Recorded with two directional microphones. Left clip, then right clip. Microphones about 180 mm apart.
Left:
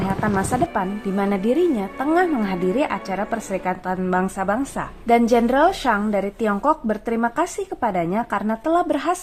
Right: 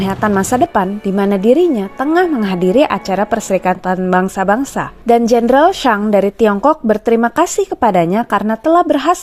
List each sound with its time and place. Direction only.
0.2 s a woman's voice: 40° right (ahead or behind)